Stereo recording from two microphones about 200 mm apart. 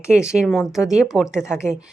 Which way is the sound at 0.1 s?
5° right (ahead or behind).